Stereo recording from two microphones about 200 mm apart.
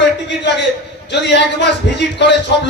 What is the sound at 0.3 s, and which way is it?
A man's voice, 60° left (ahead or behind).